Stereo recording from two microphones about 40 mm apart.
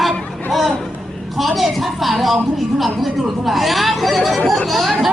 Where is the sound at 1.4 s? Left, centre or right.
Centre.